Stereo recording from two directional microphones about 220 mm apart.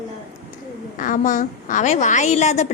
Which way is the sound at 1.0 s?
35° left (ahead or behind).